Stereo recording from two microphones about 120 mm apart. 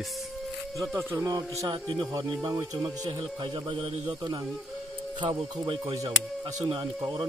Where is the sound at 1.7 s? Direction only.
40° right (ahead or behind).